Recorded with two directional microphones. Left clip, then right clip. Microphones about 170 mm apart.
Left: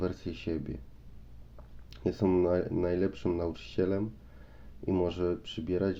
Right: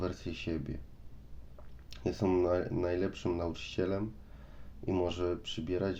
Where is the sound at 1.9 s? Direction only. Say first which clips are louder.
Left 3 dB; 25° left (ahead or behind).